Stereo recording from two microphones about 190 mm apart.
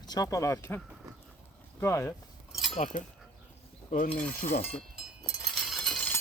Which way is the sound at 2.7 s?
40° left (ahead or behind).